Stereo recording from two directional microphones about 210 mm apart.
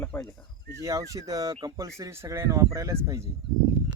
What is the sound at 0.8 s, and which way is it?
Speech, 15° right (ahead or behind).